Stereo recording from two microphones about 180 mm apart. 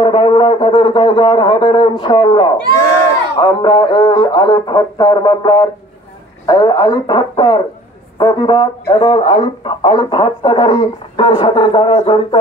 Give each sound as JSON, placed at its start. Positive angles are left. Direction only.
{"t": 0.0, "sound": "speech", "side_deg": 30}